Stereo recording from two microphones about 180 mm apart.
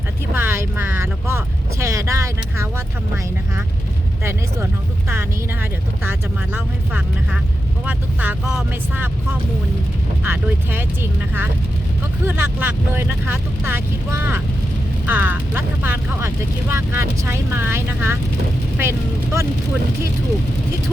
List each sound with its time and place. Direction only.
0.3 s speech: 10° right (ahead or behind)
4.2 s speech: 15° right (ahead or behind)
10.2 s speech: 10° right (ahead or behind)